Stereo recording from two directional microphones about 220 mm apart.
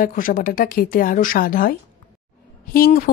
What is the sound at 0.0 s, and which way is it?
A woman's voice, 40° left (ahead or behind).